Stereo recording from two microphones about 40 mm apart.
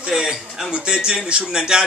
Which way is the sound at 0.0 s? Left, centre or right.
Centre.